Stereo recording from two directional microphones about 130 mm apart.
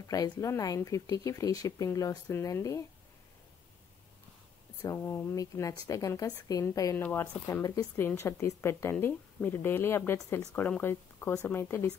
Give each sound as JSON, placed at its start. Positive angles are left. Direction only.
{"t": 0.1, "sound": "speech", "side_deg": 25}
{"t": 4.8, "sound": "speech", "side_deg": 20}